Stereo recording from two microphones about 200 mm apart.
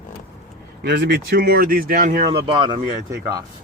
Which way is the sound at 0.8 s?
55° right (ahead or behind).